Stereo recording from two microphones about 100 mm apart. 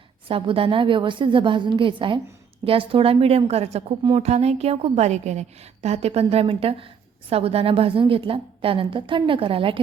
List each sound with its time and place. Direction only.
0.3 s a woman's voice: 60° right (ahead or behind)
7.3 s a woman's voice: 80° right; by 9.8 s 65° right (ahead or behind)